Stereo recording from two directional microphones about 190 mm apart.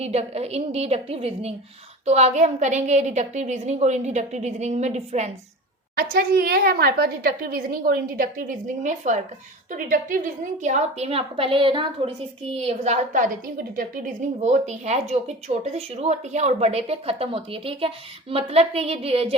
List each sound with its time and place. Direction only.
0.0 s a woman's voice: 35° right (ahead or behind)
6.0 s a woman's voice: 55° right (ahead or behind); by 19.4 s 30° right (ahead or behind)